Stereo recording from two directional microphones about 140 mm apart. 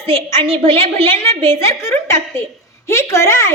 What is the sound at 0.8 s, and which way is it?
A woman's voice, 15° left (ahead or behind).